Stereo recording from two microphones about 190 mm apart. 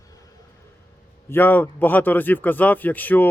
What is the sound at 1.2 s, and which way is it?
Speech, 10° left (ahead or behind).